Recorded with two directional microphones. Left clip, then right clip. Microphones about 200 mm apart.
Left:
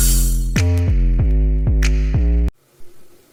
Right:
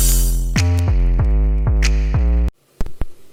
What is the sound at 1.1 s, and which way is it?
Music, 40° right (ahead or behind).